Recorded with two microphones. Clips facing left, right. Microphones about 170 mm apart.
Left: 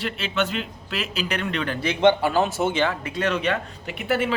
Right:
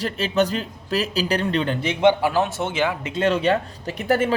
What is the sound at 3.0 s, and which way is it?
Speech, 25° right (ahead or behind).